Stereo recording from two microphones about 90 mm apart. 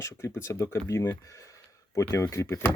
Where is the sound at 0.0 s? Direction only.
35° left (ahead or behind).